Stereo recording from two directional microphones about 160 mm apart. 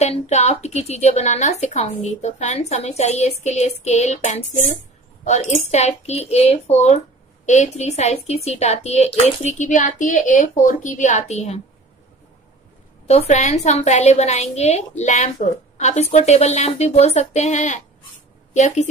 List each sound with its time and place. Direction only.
0.0 s a woman's voice: 45° left (ahead or behind)
13.0 s a woman's voice: 40° left (ahead or behind)